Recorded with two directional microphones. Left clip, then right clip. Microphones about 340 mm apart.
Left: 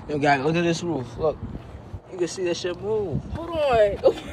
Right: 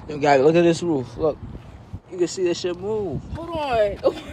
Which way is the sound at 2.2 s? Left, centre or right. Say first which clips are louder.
Right 3 dB; right.